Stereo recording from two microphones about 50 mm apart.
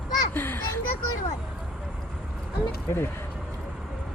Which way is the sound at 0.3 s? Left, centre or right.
Left.